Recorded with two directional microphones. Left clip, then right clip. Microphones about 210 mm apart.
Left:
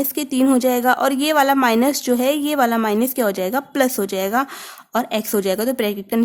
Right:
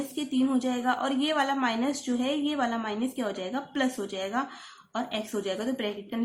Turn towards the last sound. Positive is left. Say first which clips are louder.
# left 11 dB
turn(degrees=55)  # may be behind; listen again after turning